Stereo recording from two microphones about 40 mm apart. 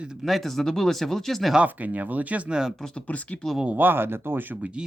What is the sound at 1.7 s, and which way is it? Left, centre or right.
Speech, right.